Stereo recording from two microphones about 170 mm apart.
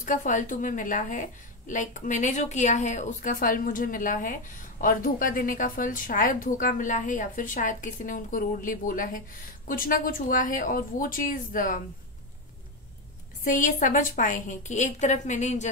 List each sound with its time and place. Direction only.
0.0 s a woman's voice: 50° left (ahead or behind)
13.4 s a woman's voice: 50° left (ahead or behind)